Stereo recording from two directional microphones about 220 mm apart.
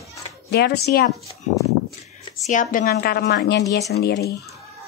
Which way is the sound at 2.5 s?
35° left (ahead or behind).